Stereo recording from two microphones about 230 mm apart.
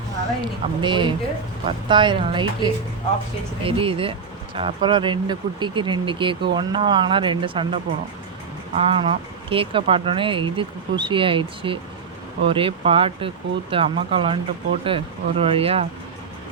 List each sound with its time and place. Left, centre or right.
0.8 s speech: right